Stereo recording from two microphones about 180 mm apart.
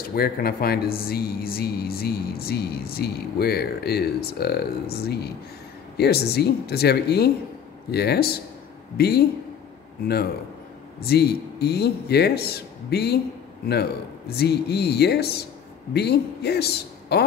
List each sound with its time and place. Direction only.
0.0 s speech: 55° left (ahead or behind)
11.0 s a man's voice: 60° left (ahead or behind)